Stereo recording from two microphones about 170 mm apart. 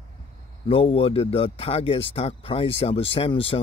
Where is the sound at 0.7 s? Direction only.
35° left (ahead or behind).